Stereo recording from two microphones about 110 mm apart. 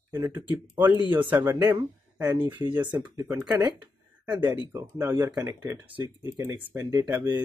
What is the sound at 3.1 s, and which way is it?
Speech, 30° right (ahead or behind).